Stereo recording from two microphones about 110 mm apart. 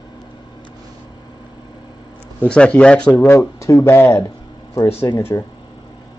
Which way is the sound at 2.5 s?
10° left (ahead or behind).